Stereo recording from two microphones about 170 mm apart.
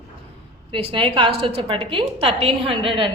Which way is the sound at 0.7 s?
30° right (ahead or behind).